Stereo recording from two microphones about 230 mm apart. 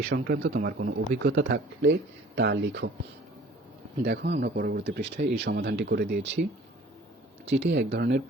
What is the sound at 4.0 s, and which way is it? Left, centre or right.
Speech, right.